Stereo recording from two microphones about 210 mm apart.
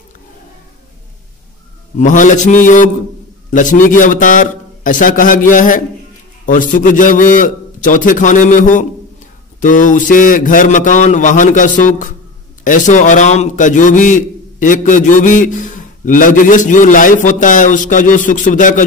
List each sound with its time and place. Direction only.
2.0 s a man's voice: 35° left (ahead or behind)